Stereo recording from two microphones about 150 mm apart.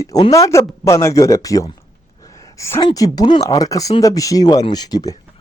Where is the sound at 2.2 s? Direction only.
20° left (ahead or behind).